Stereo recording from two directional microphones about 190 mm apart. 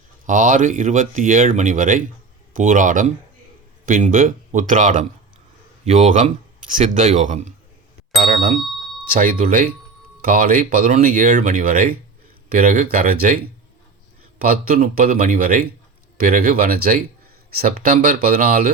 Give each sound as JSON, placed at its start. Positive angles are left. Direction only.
{"t": 0.3, "sound": "speech", "side_deg": -40}
{"t": 8.2, "sound": "speech", "side_deg": -50}